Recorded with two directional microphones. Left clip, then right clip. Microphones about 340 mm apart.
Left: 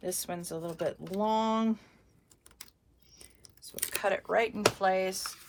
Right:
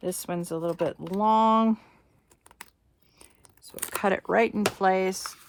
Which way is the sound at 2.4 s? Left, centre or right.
Centre.